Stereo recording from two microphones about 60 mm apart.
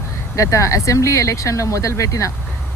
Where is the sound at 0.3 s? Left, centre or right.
Left.